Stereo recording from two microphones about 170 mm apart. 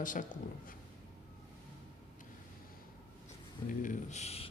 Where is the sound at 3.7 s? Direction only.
50° left (ahead or behind).